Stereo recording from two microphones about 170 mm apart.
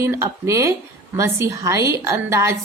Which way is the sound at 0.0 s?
15° right (ahead or behind).